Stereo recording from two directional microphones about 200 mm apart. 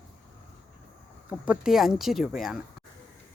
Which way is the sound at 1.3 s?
5° right (ahead or behind).